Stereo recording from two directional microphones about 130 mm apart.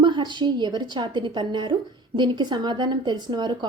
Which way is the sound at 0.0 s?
35° right (ahead or behind).